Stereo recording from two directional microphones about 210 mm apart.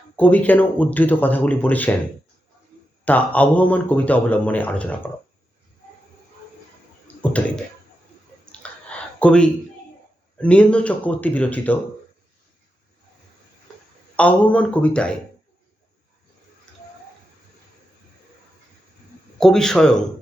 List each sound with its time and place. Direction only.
0.2 s a man's voice: 5° left (ahead or behind)
3.0 s a man's voice: 5° left (ahead or behind)
7.2 s speech: 5° left (ahead or behind)
8.6 s a sound: 5° left (ahead or behind)
10.3 s a man's voice: 5° left (ahead or behind)
14.2 s speech: 5° left (ahead or behind)
19.4 s speech: centre (ahead or behind)